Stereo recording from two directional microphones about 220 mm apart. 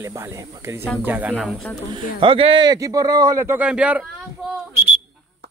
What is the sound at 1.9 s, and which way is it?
Speech, 20° right (ahead or behind).